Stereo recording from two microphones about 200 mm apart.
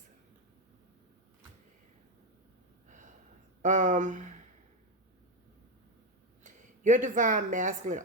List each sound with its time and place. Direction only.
3.6 s speech: 40° right (ahead or behind)
6.4 s speech: 40° right (ahead or behind)